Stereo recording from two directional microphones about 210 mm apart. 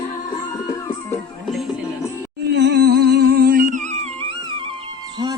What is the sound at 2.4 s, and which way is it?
Music, 50° right (ahead or behind).